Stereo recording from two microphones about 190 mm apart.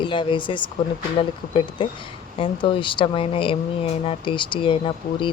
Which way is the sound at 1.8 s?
25° left (ahead or behind).